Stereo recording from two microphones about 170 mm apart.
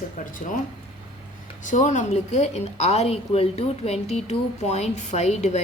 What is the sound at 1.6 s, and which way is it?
A woman's voice, 45° left (ahead or behind).